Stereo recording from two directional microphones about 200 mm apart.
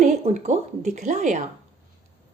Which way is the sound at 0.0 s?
35° right (ahead or behind).